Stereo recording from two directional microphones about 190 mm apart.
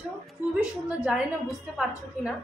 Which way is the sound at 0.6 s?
5° right (ahead or behind).